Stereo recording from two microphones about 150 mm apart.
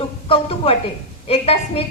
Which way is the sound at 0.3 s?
40° left (ahead or behind).